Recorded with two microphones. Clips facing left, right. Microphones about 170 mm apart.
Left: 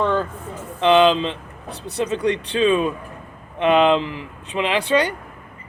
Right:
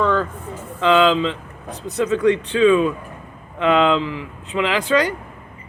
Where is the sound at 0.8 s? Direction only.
25° left (ahead or behind).